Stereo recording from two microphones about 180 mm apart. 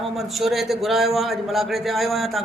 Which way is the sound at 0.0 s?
Centre (ahead or behind).